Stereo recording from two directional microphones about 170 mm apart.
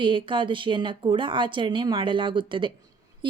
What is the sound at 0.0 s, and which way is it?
A woman's voice, 30° right (ahead or behind).